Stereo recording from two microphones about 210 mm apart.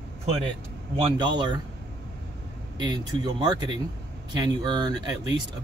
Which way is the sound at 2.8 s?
20° right (ahead or behind).